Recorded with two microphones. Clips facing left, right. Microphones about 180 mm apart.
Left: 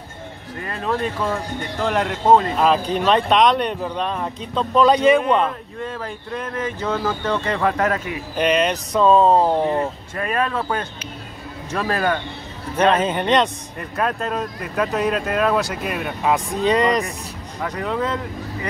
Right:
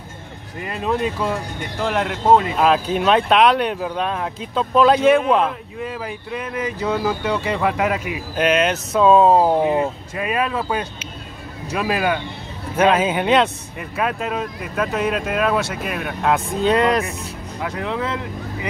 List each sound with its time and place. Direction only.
0.7 s speech: 15° right (ahead or behind)